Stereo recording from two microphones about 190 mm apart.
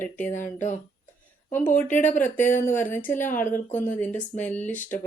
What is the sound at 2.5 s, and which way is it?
Speech, 40° left (ahead or behind).